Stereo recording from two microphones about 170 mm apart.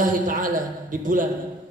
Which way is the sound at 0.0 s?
55° right (ahead or behind).